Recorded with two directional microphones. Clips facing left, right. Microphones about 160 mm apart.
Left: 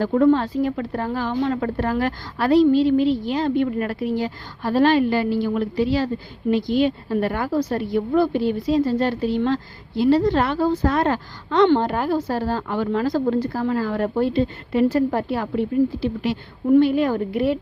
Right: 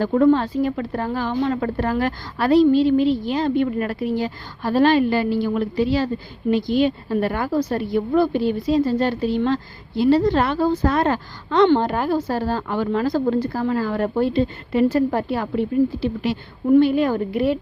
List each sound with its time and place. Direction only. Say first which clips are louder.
0.0 s a woman's voice: right 1 dB; 25° right (ahead or behind)